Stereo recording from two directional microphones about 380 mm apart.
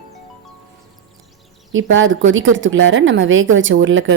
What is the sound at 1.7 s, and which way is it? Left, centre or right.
A woman's voice, right.